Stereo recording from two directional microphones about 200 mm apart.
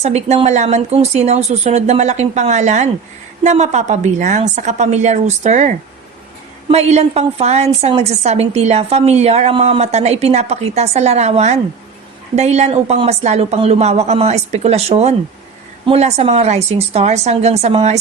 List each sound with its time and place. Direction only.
0.0 s a woman's voice: 35° right (ahead or behind)